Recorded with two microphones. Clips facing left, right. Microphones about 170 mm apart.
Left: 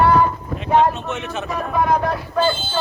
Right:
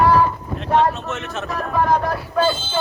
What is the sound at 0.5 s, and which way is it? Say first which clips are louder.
Speech: left 1 dB; 5° left (ahead or behind).